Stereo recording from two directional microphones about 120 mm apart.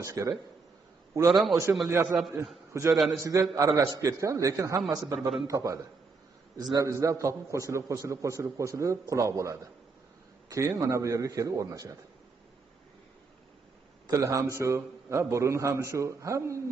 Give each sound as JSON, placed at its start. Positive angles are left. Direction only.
{"t": 0.0, "sound": "a man's voice", "side_deg": -25}
{"t": 1.3, "sound": "a man's voice", "side_deg": 0}
{"t": 1.9, "sound": "a man's voice", "side_deg": -20}
{"t": 14.0, "sound": "a man's voice", "side_deg": -25}